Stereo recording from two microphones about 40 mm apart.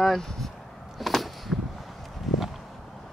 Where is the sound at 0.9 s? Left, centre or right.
Centre.